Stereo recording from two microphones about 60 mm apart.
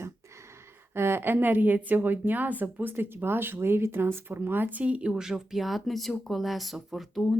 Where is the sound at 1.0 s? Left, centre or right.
Right.